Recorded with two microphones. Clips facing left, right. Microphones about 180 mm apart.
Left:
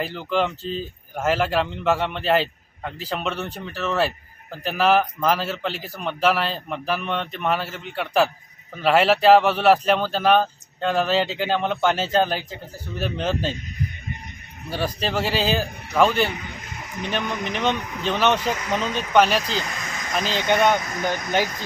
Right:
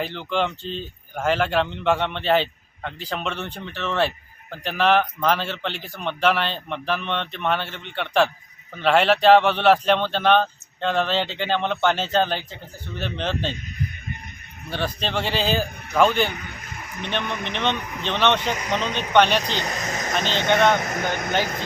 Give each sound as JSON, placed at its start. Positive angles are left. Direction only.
{"t": 0.0, "sound": "a man's voice", "side_deg": 5}
{"t": 14.7, "sound": "a man's voice", "side_deg": 10}
{"t": 19.6, "sound": "a sound", "side_deg": -40}
{"t": 20.8, "sound": "speech", "side_deg": -50}